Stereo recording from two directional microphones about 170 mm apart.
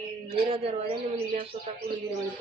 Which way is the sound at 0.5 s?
35° right (ahead or behind).